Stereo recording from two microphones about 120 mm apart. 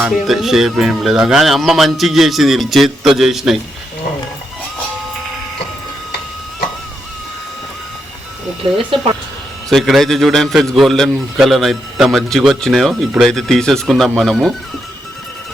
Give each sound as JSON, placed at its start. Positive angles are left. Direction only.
{"t": 0.3, "sound": "a man's voice", "side_deg": 0}
{"t": 8.9, "sound": "speech", "side_deg": -50}
{"t": 9.6, "sound": "a man's voice", "side_deg": 0}